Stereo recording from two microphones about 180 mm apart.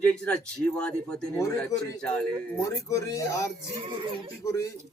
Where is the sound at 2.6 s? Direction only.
15° left (ahead or behind).